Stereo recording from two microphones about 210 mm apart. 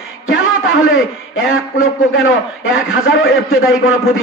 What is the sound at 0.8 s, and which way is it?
A man's voice, 75° left (ahead or behind).